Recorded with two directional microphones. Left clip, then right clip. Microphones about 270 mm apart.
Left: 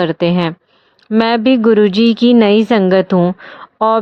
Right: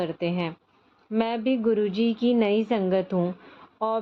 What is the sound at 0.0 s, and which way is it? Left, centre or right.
Speech, left.